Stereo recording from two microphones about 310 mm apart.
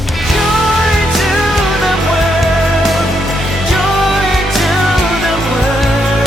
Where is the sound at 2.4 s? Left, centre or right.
Centre.